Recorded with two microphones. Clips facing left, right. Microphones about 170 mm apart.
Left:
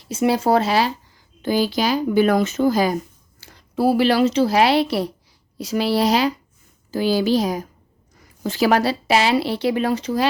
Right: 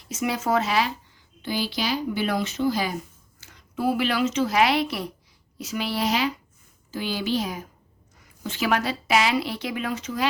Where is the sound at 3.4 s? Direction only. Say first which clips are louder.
Left 7 dB; 35° left (ahead or behind).